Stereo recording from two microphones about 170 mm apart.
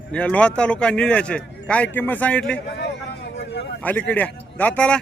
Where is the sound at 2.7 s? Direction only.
80° left.